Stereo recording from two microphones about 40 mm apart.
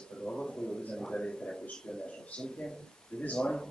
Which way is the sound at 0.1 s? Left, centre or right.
Centre.